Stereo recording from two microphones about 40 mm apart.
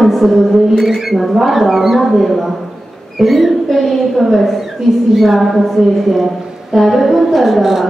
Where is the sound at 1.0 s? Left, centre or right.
Centre.